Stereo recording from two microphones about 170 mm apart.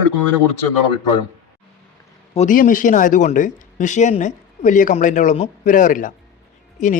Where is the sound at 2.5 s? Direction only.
50° left (ahead or behind).